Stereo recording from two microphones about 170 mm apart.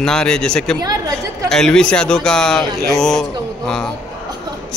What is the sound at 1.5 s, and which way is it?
A man's voice, 5° left (ahead or behind).